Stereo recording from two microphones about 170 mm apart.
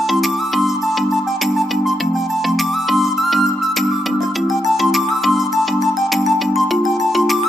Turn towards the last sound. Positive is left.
turn(degrees=0)  # may be behind; listen again after turning